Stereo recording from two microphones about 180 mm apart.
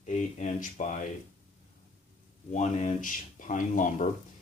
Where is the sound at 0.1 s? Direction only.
40° left (ahead or behind).